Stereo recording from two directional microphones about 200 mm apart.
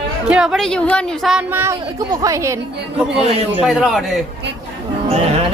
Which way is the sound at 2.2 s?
15° right (ahead or behind).